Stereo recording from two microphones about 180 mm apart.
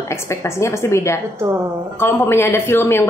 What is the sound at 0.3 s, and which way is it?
A woman's voice, 15° left (ahead or behind).